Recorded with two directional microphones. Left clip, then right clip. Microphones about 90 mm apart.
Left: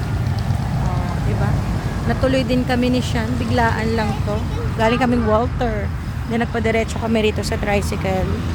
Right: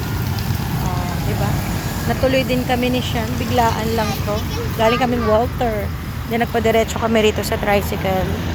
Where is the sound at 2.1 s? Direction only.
15° left (ahead or behind).